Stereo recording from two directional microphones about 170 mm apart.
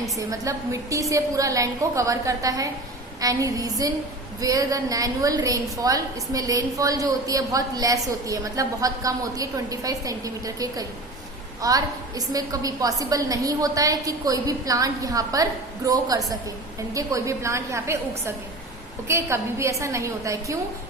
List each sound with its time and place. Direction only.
0.0 s a woman's voice: 20° right (ahead or behind)